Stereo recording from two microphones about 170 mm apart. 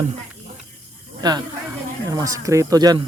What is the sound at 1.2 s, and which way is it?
Speech, 25° right (ahead or behind).